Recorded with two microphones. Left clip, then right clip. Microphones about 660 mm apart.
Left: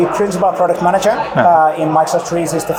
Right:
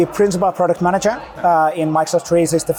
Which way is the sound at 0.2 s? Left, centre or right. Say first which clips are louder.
Left 2 dB; right.